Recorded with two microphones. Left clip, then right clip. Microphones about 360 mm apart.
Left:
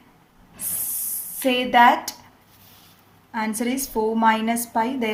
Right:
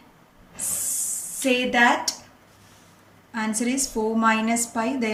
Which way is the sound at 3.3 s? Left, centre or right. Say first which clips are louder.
Left 1 dB; centre.